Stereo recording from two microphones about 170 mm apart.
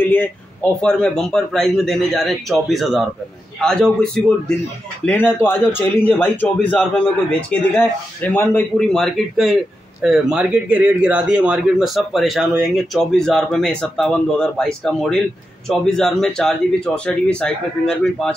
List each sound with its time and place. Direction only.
0.0 s a man's voice: 10° left (ahead or behind)